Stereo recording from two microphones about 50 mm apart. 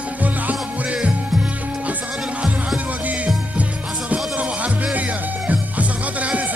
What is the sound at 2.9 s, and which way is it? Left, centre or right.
Music, right.